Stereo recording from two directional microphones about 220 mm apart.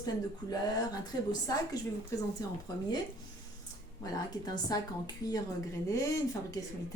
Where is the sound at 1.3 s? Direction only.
15° left (ahead or behind).